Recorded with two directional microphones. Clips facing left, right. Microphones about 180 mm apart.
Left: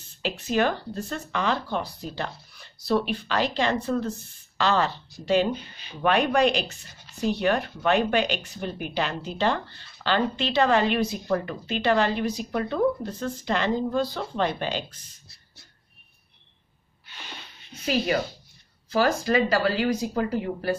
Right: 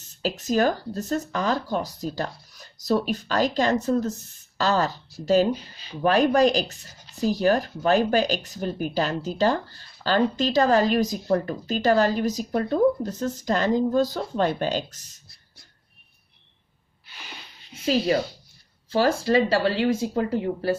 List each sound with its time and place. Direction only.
0.2 s speech: 40° right (ahead or behind)
17.8 s speech: 30° right (ahead or behind)